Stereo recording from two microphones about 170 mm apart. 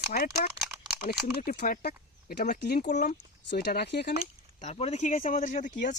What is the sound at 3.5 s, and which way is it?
Speech, 75° left (ahead or behind).